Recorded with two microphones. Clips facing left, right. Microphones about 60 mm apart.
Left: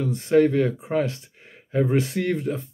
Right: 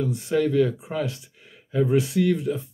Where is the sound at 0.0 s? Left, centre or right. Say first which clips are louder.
Left 4 dB; left.